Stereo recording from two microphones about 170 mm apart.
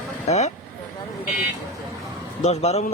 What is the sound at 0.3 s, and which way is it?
Speech, 40° left (ahead or behind).